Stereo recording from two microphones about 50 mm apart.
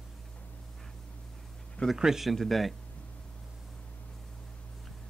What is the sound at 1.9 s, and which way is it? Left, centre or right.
Speech, centre.